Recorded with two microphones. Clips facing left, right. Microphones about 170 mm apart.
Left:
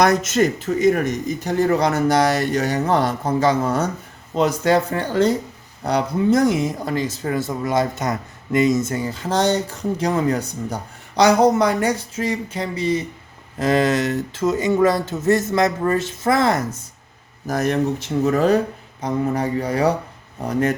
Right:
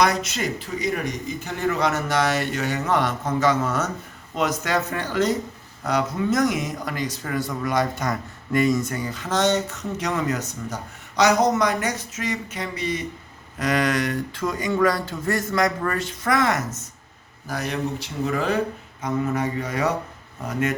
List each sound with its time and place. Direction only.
0.0 s speech: 45° left (ahead or behind); by 16.6 s 30° left (ahead or behind)
17.4 s speech: 45° left (ahead or behind)